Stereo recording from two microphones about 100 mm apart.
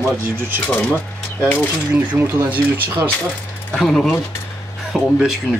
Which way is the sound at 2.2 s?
20° right (ahead or behind).